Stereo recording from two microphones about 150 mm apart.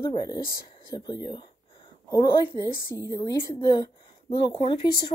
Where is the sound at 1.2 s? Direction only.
30° left (ahead or behind).